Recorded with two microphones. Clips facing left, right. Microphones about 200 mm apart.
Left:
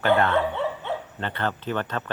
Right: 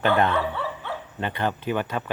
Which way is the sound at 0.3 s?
20° left (ahead or behind).